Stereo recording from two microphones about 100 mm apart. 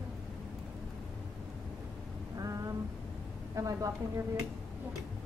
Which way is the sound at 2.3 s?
35° right (ahead or behind).